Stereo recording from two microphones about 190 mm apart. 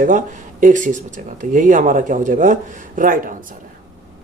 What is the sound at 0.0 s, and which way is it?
Speech, 45° right (ahead or behind).